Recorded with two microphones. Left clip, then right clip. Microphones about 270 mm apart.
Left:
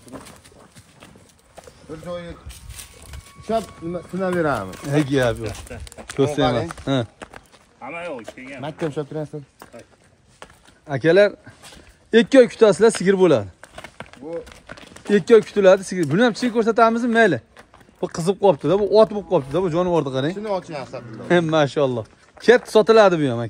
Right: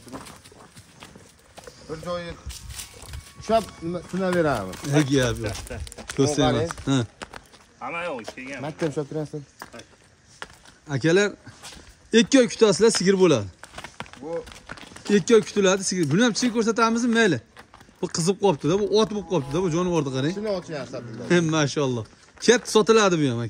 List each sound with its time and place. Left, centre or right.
0.1 s horse: centre
1.9 s speech: right
2.4 s a sound: centre
3.6 s speech: centre
4.4 s speech: centre
4.7 s speech: centre
7.8 s speech: right
10.4 s a sound: centre
14.3 s speech: centre
20.5 s speech: centre
21.3 s speech: centre